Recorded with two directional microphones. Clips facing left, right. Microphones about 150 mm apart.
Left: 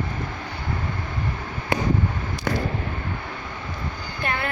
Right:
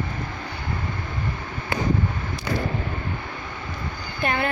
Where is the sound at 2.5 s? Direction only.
55° left (ahead or behind).